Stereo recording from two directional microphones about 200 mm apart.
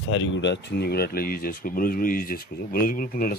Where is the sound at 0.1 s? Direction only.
65° left (ahead or behind).